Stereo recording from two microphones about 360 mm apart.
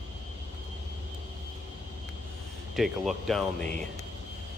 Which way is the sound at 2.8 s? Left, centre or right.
Centre.